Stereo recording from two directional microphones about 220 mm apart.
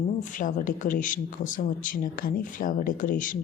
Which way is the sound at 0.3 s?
35° left (ahead or behind).